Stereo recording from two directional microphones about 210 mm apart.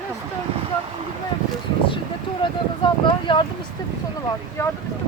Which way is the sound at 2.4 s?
20° left (ahead or behind).